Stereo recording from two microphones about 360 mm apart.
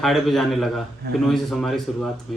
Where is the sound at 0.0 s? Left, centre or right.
Centre.